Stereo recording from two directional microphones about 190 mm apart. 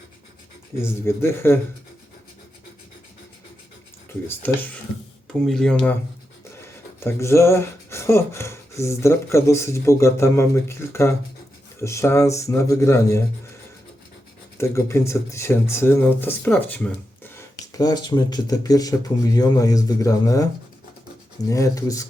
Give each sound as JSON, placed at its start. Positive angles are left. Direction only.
{"t": 0.8, "sound": "speech", "side_deg": 15}
{"t": 4.3, "sound": "speech", "side_deg": 10}
{"t": 14.6, "sound": "speech", "side_deg": 15}